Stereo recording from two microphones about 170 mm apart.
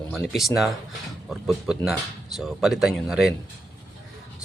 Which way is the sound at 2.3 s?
Centre (ahead or behind).